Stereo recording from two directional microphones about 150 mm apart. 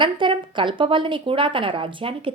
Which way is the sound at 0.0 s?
35° right (ahead or behind).